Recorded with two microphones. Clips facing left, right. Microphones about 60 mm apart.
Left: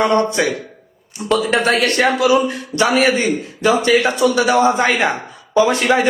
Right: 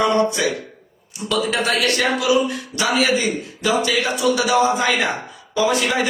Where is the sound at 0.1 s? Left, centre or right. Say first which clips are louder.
Left 2 dB; left.